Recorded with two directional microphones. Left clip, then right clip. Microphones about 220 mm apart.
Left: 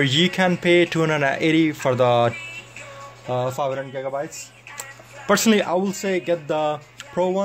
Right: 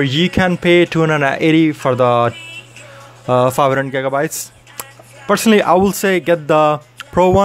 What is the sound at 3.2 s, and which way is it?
Speech, 35° right (ahead or behind).